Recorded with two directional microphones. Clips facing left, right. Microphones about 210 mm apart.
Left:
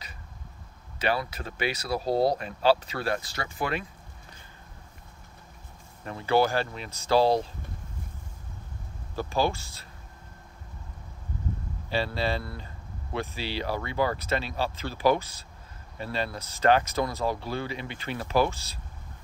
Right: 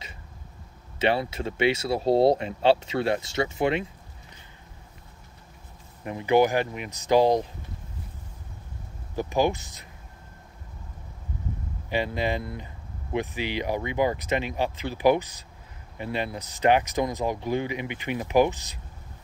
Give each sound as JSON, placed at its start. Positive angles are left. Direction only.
{"t": 0.9, "sound": "speech", "side_deg": -25}
{"t": 6.0, "sound": "speech", "side_deg": -15}
{"t": 9.1, "sound": "speech", "side_deg": -15}
{"t": 11.9, "sound": "speech", "side_deg": -15}